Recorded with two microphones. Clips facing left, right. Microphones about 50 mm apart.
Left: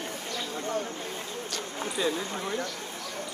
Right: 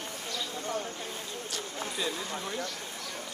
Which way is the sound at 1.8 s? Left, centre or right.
Left.